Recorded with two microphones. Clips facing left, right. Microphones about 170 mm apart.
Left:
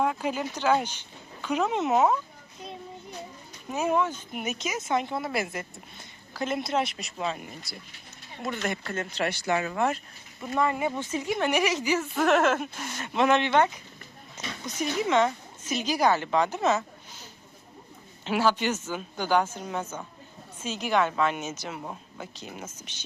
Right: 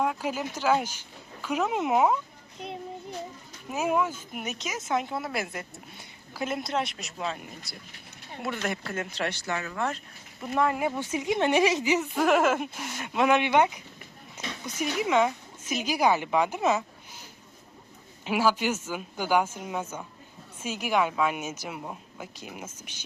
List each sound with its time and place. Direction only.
0.0 s speech: centre (ahead or behind)
3.7 s speech: 5° right (ahead or behind)
9.3 s speech: 20° left (ahead or behind)
10.4 s a woman's voice: 5° right (ahead or behind)
18.3 s a woman's voice: 10° right (ahead or behind)